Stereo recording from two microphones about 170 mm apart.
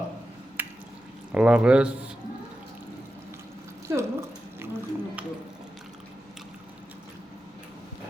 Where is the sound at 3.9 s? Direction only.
15° right (ahead or behind).